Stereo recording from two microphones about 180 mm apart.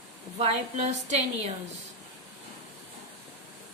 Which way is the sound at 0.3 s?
35° right (ahead or behind).